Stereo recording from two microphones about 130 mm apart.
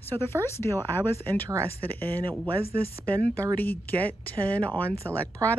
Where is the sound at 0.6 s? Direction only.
45° right (ahead or behind).